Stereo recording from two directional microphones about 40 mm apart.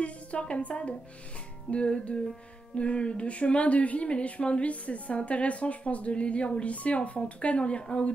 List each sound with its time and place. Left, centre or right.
0.0 s speech: left
1.7 s music: left
2.7 s speech: left